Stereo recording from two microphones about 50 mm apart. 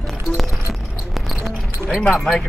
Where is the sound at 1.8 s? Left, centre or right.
Left.